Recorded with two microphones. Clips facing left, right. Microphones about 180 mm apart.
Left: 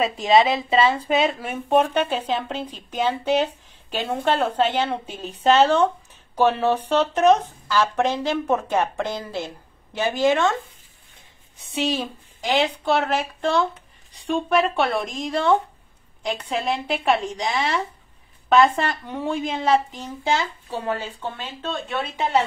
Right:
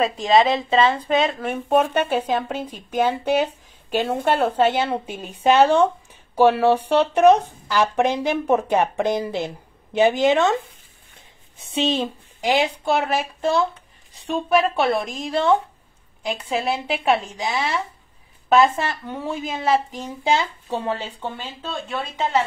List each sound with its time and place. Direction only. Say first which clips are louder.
0.0 s speech: right 1 dB; centre (ahead or behind); by 10.6 s 15° right (ahead or behind)
11.7 s speech: right 3 dB; 25° right (ahead or behind)
12.5 s speech: left 1 dB; 10° right (ahead or behind)
21.4 s speech: left 1 dB; 5° right (ahead or behind)